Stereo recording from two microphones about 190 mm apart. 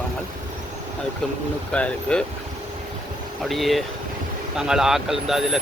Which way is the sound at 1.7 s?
5° left (ahead or behind).